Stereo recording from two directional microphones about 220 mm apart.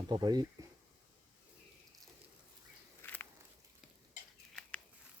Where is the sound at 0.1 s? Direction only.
20° right (ahead or behind).